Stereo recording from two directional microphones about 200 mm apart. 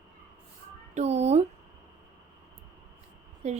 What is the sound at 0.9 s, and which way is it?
Speech, 35° right (ahead or behind).